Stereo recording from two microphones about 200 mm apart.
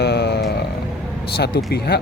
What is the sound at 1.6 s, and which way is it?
Speech, 50° left (ahead or behind).